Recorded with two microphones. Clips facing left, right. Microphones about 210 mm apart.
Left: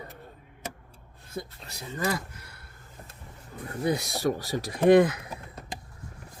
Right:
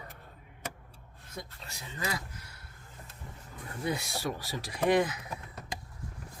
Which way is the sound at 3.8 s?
40° left (ahead or behind).